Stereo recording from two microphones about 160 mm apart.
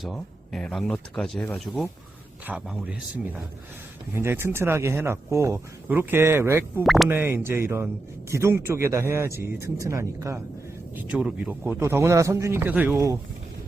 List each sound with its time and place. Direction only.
0.0 s speech: centre (ahead or behind)
4.1 s speech: 15° right (ahead or behind)
6.8 s speech: centre (ahead or behind)
7.1 s speech: 10° right (ahead or behind)
11.0 s speech: 5° right (ahead or behind)